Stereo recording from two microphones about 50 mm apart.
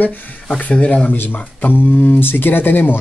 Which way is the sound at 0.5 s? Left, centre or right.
Left.